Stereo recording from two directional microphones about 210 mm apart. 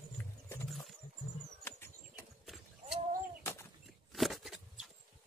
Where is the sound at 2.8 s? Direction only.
30° right (ahead or behind).